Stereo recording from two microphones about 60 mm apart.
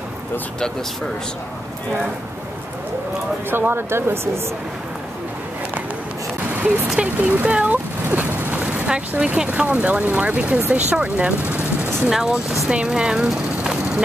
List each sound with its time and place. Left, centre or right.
3.4 s speech: right
6.5 s speech: right
7.0 s a sound: centre
8.8 s speech: centre
12.1 s speech: centre